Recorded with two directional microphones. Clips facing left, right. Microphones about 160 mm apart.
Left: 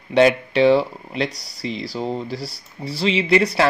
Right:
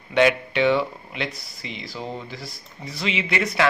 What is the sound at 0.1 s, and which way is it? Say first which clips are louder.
Speech: left 4 dB; 35° left (ahead or behind).